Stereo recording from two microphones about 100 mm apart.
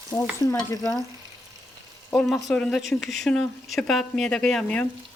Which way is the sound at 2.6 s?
10° left (ahead or behind).